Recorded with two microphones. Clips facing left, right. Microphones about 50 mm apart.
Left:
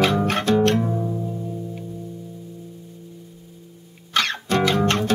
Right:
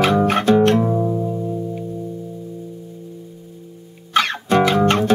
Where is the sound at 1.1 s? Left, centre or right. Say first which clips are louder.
Right 6 dB; right.